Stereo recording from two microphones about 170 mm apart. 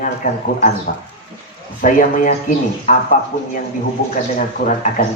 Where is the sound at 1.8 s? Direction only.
50° left (ahead or behind).